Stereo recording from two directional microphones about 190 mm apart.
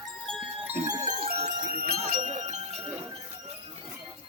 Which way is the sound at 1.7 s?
50° right (ahead or behind).